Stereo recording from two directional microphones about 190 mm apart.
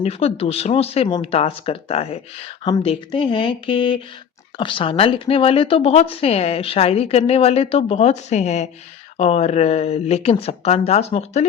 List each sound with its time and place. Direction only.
0.0 s speech: 30° left (ahead or behind)